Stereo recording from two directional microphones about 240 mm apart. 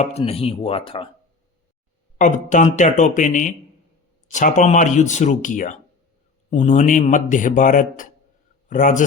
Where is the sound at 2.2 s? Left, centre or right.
Left.